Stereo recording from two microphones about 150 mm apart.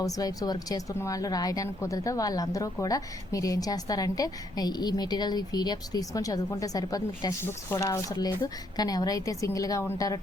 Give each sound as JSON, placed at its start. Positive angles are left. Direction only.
{"t": 0.0, "sound": "speech", "side_deg": 25}